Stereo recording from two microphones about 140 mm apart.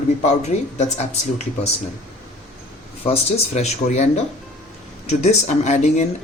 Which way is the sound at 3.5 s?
55° left (ahead or behind).